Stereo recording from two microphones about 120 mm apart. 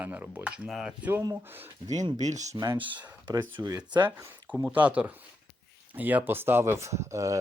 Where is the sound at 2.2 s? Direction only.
75° right (ahead or behind).